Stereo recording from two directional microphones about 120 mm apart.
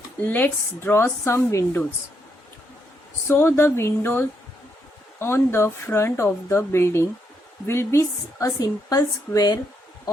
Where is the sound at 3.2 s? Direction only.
20° left (ahead or behind).